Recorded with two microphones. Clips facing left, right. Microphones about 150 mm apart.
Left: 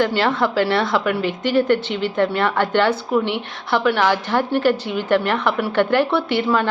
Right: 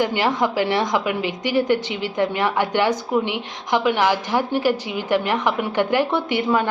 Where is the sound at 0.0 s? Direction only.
15° right (ahead or behind).